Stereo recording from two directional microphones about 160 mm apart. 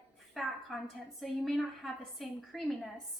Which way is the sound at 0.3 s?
Centre (ahead or behind).